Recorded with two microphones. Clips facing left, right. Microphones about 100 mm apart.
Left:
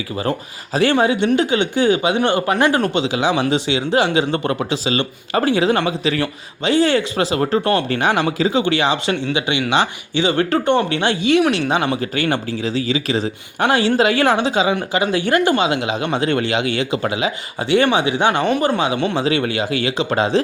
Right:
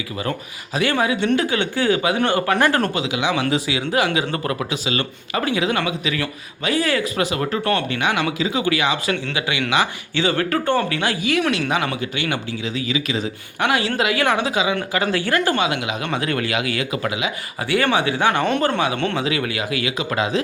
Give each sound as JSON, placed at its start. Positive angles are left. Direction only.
{"t": 0.2, "sound": "speech", "side_deg": 35}
{"t": 1.4, "sound": "speech", "side_deg": 20}
{"t": 11.9, "sound": "speech", "side_deg": 40}
{"t": 14.8, "sound": "speech", "side_deg": 15}
{"t": 17.8, "sound": "speech", "side_deg": 20}